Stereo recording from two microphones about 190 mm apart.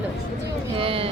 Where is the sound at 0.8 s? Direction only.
30° right (ahead or behind).